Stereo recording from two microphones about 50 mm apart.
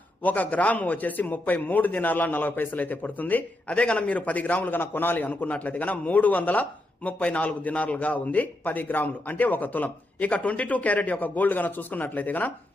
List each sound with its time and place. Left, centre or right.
0.2 s a man's voice: left